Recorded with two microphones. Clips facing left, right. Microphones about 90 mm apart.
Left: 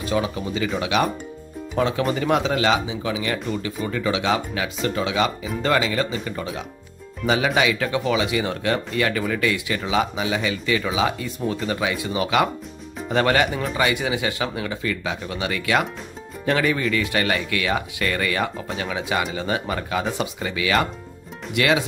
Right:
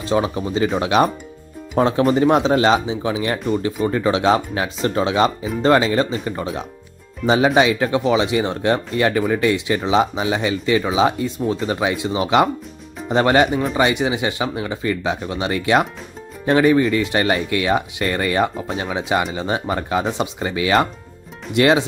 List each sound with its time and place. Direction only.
0.0 s speech: 30° right (ahead or behind)